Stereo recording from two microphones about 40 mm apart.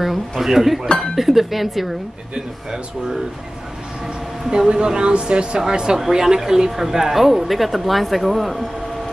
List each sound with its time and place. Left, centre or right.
0.0 s speech: centre
4.5 s speech: right; by 8.6 s centre